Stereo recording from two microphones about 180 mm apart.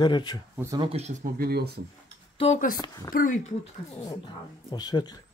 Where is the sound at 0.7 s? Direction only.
35° right (ahead or behind).